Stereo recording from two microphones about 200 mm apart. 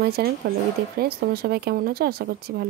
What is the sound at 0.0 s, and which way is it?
Speech, 50° right (ahead or behind).